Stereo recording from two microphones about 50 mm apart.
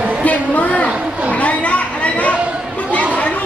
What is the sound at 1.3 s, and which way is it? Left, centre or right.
Chatter, left.